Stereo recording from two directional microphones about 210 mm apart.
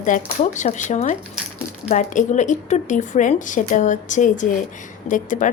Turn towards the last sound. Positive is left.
turn(degrees=40)  # may be behind; listen again after turning